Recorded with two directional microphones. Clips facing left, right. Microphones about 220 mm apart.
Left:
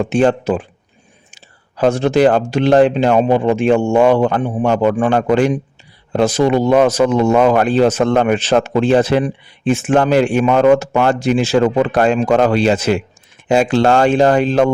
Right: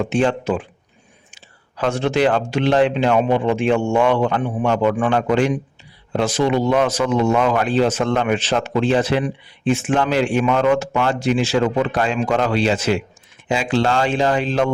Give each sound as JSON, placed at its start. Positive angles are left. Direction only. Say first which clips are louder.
{"t": 0.0, "sound": "speech", "louder": "left 5 dB", "side_deg": 40}
{"t": 1.7, "sound": "speech", "louder": "left 6 dB", "side_deg": 40}